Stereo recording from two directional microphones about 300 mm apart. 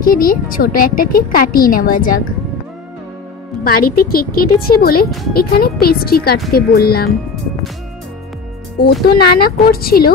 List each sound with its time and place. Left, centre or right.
0.0 s a woman's voice: left
3.6 s a woman's voice: left
9.0 s speech: left